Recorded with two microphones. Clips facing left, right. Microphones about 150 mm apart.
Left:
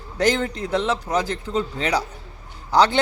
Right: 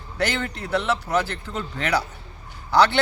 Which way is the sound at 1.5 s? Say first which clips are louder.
Left 7 dB; 30° left (ahead or behind).